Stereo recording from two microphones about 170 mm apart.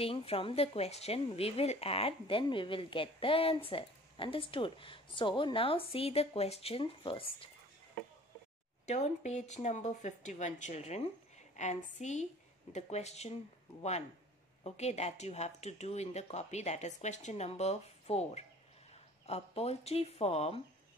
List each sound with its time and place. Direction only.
0.0 s speech: 35° left (ahead or behind)
8.8 s speech: 40° left (ahead or behind)
14.6 s speech: 40° left (ahead or behind)